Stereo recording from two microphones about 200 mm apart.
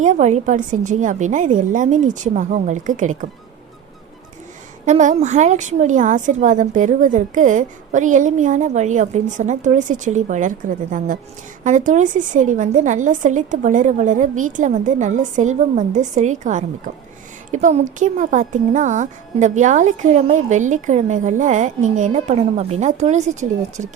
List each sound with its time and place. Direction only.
0.0 s speech: 35° right (ahead or behind)
4.9 s speech: 35° right (ahead or behind)